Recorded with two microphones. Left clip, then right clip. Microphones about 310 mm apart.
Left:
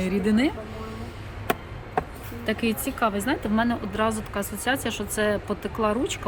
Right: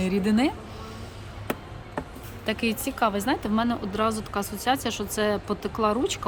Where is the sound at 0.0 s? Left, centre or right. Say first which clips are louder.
Left 1 dB; centre.